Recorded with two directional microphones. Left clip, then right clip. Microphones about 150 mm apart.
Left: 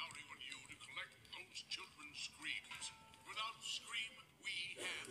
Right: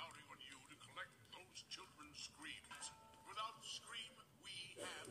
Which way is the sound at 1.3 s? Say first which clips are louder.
Left 10 dB; 35° right (ahead or behind).